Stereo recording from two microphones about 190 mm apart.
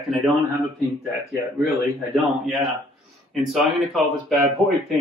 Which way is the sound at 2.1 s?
5° right (ahead or behind).